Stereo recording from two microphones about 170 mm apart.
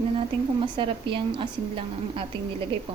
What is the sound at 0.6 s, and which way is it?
A woman's voice, 30° right (ahead or behind).